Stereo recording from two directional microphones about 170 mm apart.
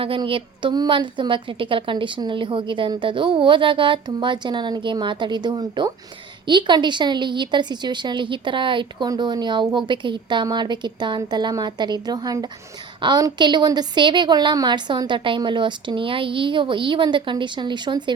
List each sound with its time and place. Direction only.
0.0 s a woman's voice: 30° right (ahead or behind)